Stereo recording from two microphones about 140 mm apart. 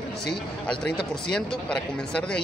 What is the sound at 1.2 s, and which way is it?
Speech, 5° left (ahead or behind).